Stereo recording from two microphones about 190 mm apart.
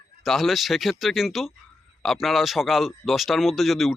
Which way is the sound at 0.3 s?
Centre (ahead or behind).